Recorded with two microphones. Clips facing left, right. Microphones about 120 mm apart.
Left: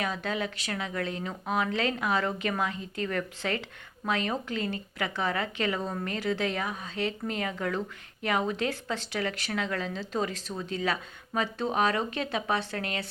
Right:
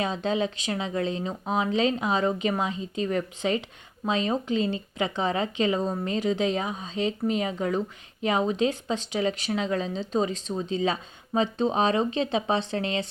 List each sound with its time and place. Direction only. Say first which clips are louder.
0.0 s speech: right 5 dB; 25° right (ahead or behind)